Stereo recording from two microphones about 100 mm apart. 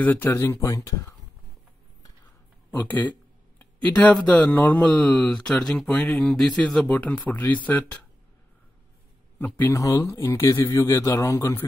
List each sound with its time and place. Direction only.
0.0 s speech: 20° left (ahead or behind)
0.5 s a man's voice: 35° left (ahead or behind)
2.7 s speech: 20° left (ahead or behind)
9.4 s speech: 20° left (ahead or behind)
9.8 s a man's voice: 30° left (ahead or behind)